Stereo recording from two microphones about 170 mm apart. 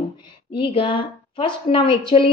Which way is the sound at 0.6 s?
30° left (ahead or behind).